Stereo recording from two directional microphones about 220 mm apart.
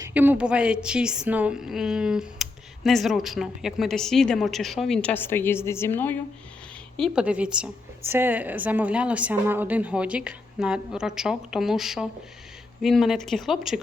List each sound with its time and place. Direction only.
0.0 s a woman's voice: 10° right (ahead or behind); by 6.1 s 10° left (ahead or behind)
6.9 s a woman's voice: centre (ahead or behind)